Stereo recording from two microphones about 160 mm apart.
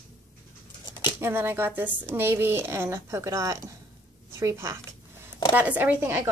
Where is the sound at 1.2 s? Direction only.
15° right (ahead or behind).